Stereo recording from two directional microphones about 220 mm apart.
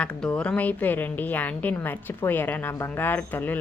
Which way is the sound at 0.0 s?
5° left (ahead or behind).